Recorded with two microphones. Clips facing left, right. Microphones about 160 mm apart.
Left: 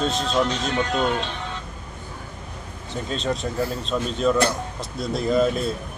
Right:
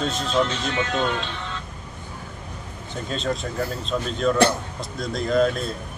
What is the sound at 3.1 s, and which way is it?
A man's voice, centre (ahead or behind).